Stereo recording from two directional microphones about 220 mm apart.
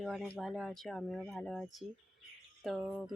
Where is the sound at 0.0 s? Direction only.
Centre (ahead or behind).